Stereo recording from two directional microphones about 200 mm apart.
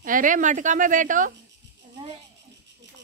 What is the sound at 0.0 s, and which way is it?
A woman's voice, 40° right (ahead or behind).